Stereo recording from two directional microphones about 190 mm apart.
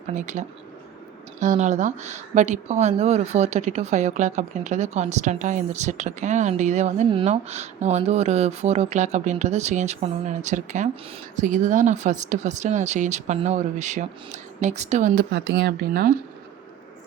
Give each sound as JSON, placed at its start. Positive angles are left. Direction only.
{"t": 0.1, "sound": "a woman's voice", "side_deg": -40}